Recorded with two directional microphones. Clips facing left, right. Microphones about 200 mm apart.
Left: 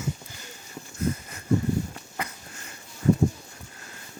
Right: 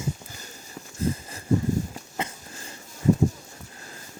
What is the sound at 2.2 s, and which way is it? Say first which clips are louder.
Sniff: right 3 dB; 30° right (ahead or behind).